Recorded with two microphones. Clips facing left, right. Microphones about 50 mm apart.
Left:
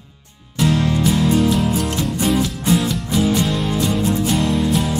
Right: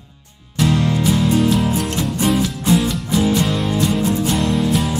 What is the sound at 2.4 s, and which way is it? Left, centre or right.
Music, centre.